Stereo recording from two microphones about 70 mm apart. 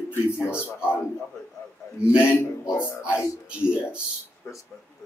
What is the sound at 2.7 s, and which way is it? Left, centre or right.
Speech, left.